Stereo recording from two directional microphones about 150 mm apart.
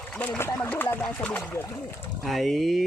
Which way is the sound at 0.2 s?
15° left (ahead or behind).